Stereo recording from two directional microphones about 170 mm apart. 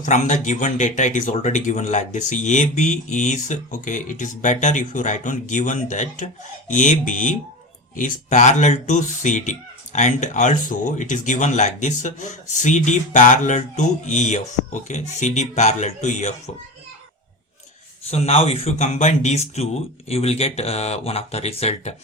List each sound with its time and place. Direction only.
0.0 s speech: 45° left (ahead or behind)
18.1 s speech: 35° left (ahead or behind)